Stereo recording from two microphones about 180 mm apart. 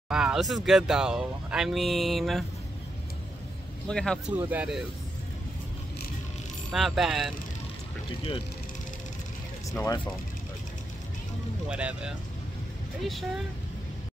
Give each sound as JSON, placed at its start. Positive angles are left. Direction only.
{"t": 0.1, "sound": "speech", "side_deg": -5}
{"t": 3.8, "sound": "speech", "side_deg": 5}
{"t": 4.4, "sound": "speech", "side_deg": -10}
{"t": 6.7, "sound": "speech", "side_deg": 0}
{"t": 9.7, "sound": "speech", "side_deg": 20}
{"t": 11.7, "sound": "speech", "side_deg": -5}